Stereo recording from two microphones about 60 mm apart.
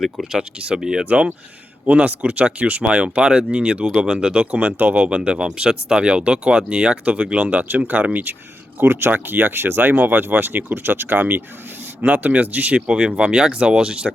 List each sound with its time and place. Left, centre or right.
0.0 s speech: centre
4.8 s speech: right
5.0 s speech: centre